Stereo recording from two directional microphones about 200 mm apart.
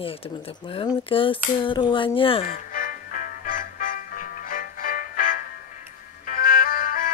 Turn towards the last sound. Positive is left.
turn(degrees=45)  # may be behind; listen again after turning